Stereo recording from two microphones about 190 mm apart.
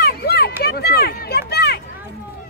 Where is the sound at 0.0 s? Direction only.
55° left (ahead or behind).